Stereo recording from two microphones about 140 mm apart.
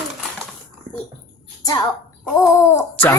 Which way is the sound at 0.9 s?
90° right.